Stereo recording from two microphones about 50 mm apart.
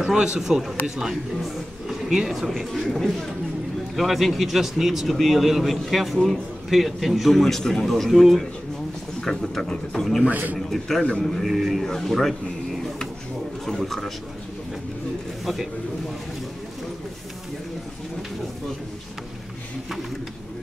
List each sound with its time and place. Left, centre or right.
0.0 s a man's voice: centre
3.9 s a man's voice: centre
10.2 s a man's voice: right
10.7 s a man's voice: centre
13.7 s a man's voice: centre
15.4 s speech: centre